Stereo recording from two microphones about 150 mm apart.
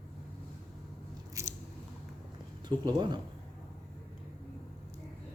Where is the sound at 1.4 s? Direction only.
20° right (ahead or behind).